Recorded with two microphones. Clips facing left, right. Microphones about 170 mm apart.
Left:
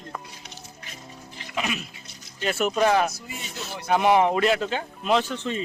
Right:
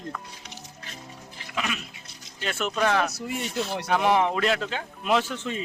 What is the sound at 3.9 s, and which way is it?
A man's voice, 5° left (ahead or behind).